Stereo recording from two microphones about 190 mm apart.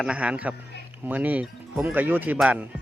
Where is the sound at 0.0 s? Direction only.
5° right (ahead or behind).